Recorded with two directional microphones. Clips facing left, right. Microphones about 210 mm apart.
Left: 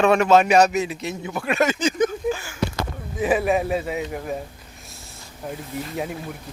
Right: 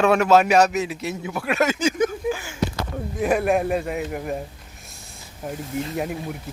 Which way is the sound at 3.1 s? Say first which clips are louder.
Even; centre (ahead or behind).